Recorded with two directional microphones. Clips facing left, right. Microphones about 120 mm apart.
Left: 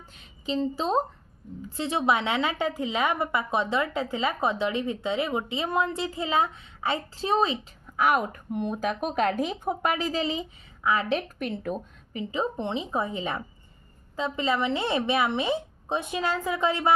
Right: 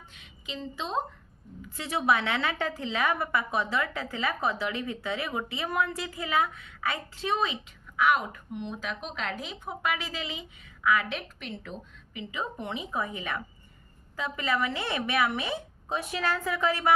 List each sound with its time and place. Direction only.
0.2 s a woman's voice: 35° left (ahead or behind)
1.6 s a woman's voice: 25° left (ahead or behind)
11.2 s a woman's voice: 50° left (ahead or behind)
12.3 s a woman's voice: 30° left (ahead or behind)